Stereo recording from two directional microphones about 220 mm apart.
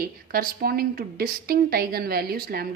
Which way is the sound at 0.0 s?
40° right (ahead or behind).